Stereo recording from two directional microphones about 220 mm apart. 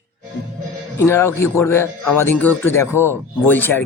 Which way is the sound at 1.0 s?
10° left (ahead or behind).